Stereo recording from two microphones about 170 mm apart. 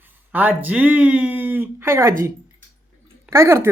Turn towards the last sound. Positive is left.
turn(degrees=-15)  # may be behind; listen again after turning